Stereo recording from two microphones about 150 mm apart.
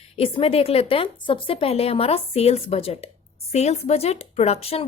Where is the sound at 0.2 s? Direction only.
40° left (ahead or behind).